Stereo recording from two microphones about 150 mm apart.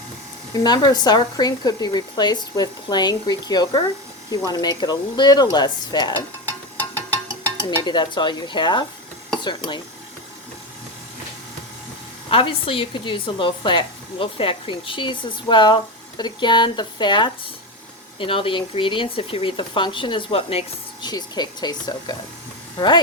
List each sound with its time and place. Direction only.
0.6 s speech: 25° left (ahead or behind)
7.8 s a woman's voice: 30° left (ahead or behind)
12.3 s a woman's voice: 40° left (ahead or behind)
21.0 s speech: 30° left (ahead or behind)